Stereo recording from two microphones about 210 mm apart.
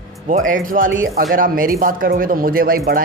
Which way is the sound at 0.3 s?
40° right (ahead or behind).